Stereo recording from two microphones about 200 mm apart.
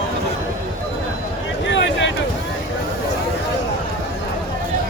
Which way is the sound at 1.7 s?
65° left (ahead or behind).